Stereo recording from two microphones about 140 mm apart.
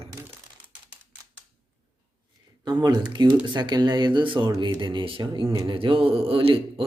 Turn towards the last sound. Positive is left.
turn(degrees=-40)  # may be behind; listen again after turning